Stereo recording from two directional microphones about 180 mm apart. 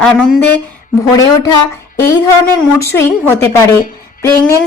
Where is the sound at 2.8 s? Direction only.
15° left (ahead or behind).